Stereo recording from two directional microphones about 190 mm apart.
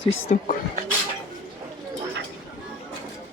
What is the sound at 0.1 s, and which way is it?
Speech, 35° left (ahead or behind).